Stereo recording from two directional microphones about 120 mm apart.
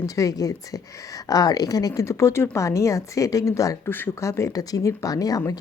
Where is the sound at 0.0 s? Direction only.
30° left (ahead or behind).